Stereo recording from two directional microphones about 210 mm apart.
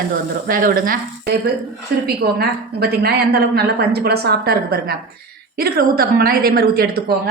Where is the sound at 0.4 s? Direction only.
45° right (ahead or behind).